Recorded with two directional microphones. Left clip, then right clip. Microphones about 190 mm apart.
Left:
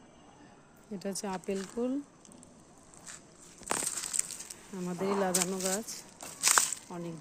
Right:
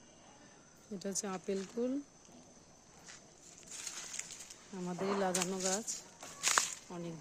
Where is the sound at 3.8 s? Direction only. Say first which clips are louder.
Left 8 dB; 60° left (ahead or behind).